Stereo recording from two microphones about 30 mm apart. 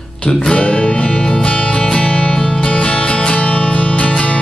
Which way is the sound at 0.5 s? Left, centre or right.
Left.